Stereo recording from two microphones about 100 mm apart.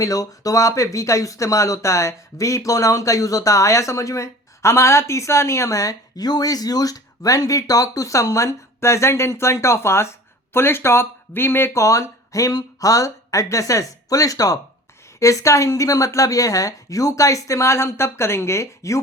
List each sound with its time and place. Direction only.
0.0 s speech: 35° left (ahead or behind)